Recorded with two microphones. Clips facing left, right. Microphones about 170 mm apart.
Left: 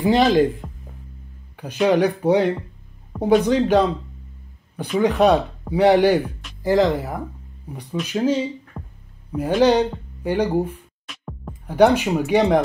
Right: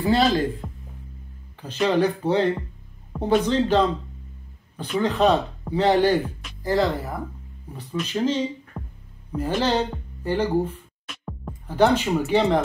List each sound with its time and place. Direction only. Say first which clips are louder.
0.0 s speech: left 4 dB; 15° left (ahead or behind)
5.0 s speech: left 4 dB; 15° left (ahead or behind)
11.1 s music: even; centre (ahead or behind)
11.6 s speech: left 4 dB; 15° left (ahead or behind)